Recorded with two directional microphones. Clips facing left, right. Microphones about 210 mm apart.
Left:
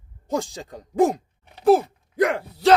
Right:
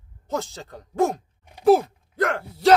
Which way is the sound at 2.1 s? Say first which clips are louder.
Left 3 dB; 15° left (ahead or behind).